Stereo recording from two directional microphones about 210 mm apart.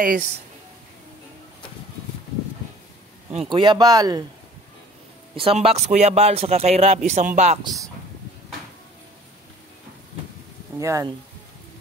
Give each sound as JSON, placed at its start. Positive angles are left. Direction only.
{"t": 0.0, "sound": "speech", "side_deg": -45}
{"t": 3.3, "sound": "speech", "side_deg": -20}
{"t": 5.3, "sound": "speech", "side_deg": -25}
{"t": 10.8, "sound": "speech", "side_deg": -15}